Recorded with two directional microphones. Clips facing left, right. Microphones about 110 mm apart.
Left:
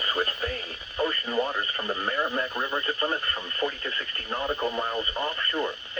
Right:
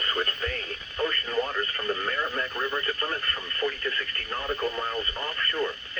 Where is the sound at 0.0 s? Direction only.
10° left (ahead or behind).